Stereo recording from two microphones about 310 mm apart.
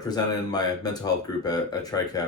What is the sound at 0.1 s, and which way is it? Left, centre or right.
Speech, centre.